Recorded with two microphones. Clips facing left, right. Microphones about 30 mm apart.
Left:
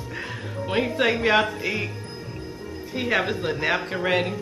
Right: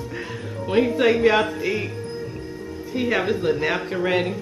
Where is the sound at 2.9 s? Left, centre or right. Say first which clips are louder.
Right 2 dB; centre.